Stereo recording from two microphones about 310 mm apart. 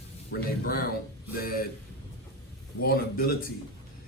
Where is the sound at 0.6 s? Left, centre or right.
Left.